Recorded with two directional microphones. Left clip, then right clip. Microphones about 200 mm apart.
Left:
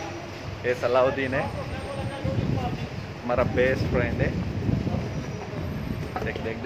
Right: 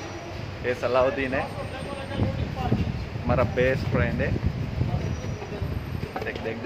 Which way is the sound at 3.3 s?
5° left (ahead or behind).